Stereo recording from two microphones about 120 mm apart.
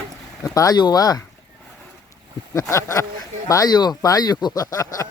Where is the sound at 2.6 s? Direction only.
25° left (ahead or behind).